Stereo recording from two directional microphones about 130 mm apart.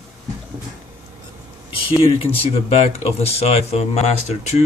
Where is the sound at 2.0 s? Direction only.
45° left (ahead or behind).